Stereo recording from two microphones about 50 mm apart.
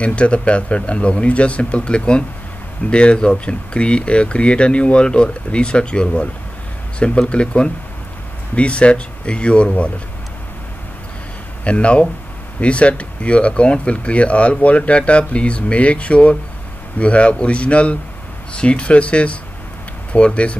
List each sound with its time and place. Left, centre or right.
0.0 s speech: left
11.6 s speech: left